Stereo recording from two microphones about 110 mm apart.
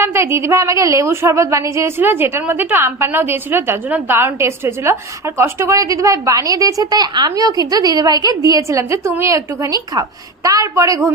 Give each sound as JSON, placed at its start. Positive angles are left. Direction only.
{"t": 0.0, "sound": "a woman's voice", "side_deg": -20}